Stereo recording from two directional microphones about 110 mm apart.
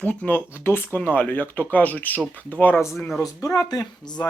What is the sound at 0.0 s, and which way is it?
Speech, 15° left (ahead or behind).